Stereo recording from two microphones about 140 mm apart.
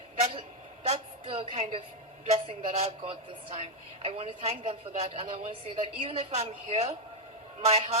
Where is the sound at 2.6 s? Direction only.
55° right (ahead or behind).